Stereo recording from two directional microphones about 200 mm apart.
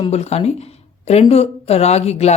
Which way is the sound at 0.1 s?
30° left (ahead or behind).